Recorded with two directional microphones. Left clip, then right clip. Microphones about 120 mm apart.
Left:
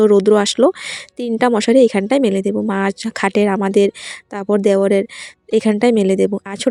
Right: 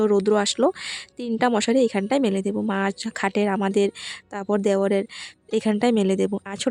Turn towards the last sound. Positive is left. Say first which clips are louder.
# left 8 dB
turn(degrees=20)  # may be behind; listen again after turning